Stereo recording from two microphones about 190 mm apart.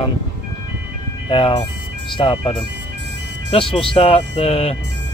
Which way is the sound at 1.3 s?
25° left (ahead or behind).